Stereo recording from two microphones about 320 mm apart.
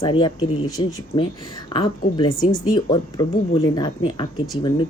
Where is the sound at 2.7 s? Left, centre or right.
Centre.